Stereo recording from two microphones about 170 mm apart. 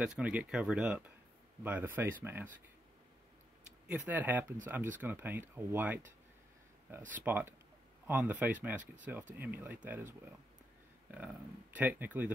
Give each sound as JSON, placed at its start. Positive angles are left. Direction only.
{"t": 0.0, "sound": "speech", "side_deg": -5}
{"t": 3.9, "sound": "speech", "side_deg": -10}
{"t": 7.0, "sound": "speech", "side_deg": -50}
{"t": 7.2, "sound": "speech", "side_deg": -10}